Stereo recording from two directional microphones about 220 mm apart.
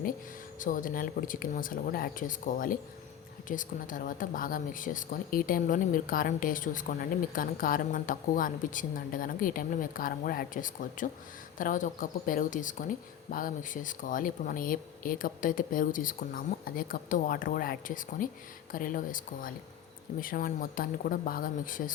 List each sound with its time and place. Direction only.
0.6 s speech: 40° left (ahead or behind)